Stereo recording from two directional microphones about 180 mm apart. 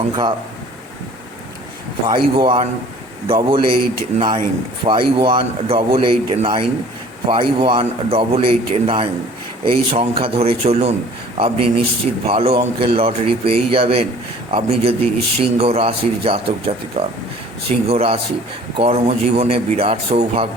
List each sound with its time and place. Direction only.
2.0 s a man's voice: 30° right (ahead or behind)